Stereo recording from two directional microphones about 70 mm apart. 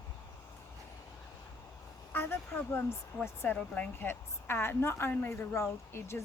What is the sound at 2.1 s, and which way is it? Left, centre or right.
Speech, left.